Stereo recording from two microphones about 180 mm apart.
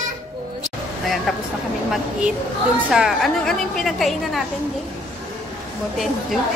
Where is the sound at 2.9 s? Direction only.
Centre (ahead or behind).